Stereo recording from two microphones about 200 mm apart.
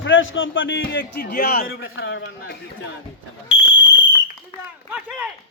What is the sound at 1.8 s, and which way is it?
Speech, 75° left (ahead or behind).